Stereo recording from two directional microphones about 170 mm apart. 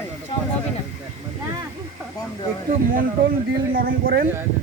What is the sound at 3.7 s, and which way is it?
Speech, 55° right (ahead or behind).